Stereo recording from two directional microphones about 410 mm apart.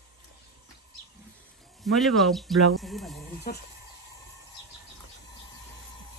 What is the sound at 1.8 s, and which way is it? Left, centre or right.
Speech, centre.